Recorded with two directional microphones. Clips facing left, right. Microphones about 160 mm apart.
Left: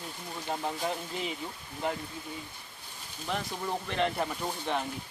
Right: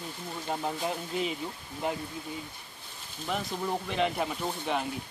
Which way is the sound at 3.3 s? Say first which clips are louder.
Right 2 dB; 5° right (ahead or behind).